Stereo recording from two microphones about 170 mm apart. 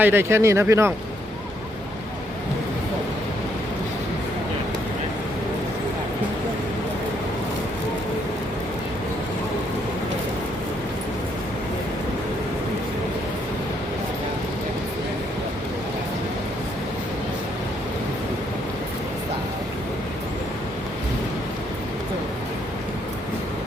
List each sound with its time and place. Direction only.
0.0 s speech: 15° right (ahead or behind)